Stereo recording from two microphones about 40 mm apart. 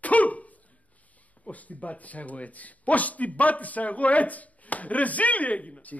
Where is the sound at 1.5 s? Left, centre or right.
Left.